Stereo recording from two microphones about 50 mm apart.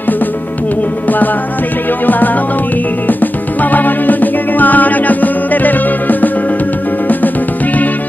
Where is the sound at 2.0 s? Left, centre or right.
Left.